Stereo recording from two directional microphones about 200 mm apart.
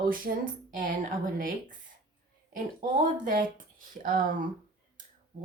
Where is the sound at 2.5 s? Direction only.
40° right (ahead or behind).